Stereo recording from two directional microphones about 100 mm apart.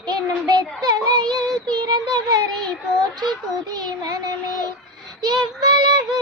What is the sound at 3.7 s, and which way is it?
Child singing, 40° right (ahead or behind).